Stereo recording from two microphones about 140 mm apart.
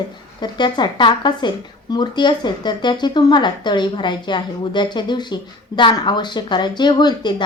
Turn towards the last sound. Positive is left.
turn(degrees=30)  # may be behind; listen again after turning